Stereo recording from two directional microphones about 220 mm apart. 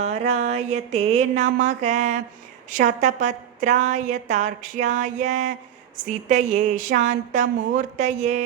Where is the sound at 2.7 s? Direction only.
35° right (ahead or behind).